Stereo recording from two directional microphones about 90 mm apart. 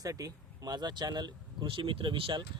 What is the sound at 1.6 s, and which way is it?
Speech, 70° right (ahead or behind).